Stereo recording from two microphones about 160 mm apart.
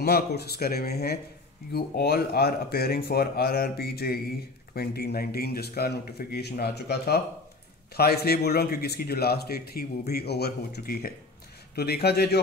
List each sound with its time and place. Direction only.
0.0 s a man's voice: 80° left
11.7 s speech: 85° left